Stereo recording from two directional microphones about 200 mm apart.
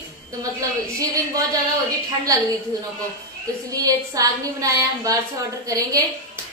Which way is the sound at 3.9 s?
15° right (ahead or behind).